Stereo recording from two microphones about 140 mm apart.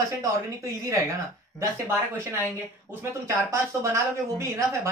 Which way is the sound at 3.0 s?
20° right (ahead or behind).